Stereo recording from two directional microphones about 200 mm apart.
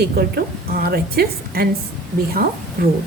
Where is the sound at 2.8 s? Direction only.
50° right (ahead or behind).